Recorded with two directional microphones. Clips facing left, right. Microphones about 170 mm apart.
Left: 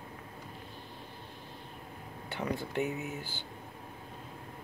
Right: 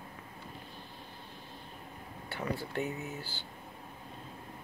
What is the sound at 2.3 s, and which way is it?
Speech, 20° left (ahead or behind).